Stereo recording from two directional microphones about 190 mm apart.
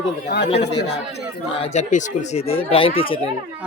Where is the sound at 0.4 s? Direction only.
35° left (ahead or behind).